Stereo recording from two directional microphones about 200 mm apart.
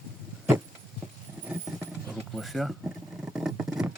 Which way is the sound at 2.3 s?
Centre (ahead or behind).